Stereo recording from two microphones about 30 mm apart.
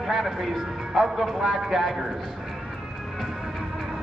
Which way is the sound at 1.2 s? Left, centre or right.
Centre.